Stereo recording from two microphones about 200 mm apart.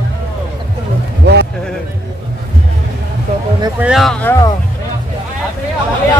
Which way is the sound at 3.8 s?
Centre (ahead or behind).